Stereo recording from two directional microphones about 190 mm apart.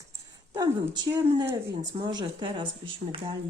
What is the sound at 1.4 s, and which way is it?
Speech, 20° right (ahead or behind).